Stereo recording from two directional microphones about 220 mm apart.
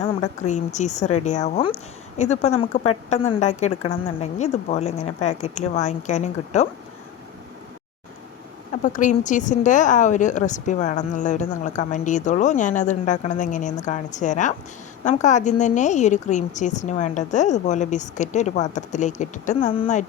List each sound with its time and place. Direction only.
0.0 s a woman's voice: 30° left (ahead or behind)
8.7 s a woman's voice: 35° left (ahead or behind)